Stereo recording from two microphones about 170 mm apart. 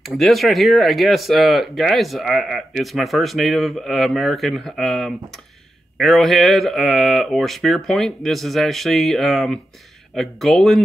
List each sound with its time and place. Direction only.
0.0 s speech: centre (ahead or behind)